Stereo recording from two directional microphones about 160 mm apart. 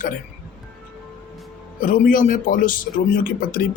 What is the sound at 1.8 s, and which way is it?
Speech, 60° left (ahead or behind).